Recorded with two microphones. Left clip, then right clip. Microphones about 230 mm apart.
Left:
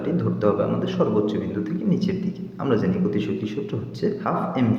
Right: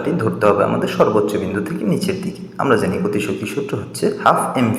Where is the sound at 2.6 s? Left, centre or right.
Centre.